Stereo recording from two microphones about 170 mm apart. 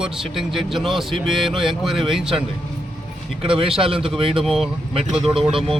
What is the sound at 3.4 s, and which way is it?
Speech, 30° right (ahead or behind).